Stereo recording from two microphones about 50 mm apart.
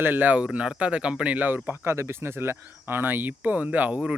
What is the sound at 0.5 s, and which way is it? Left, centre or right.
Speech, right.